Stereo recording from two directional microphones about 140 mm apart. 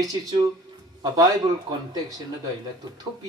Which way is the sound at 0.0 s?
25° right (ahead or behind).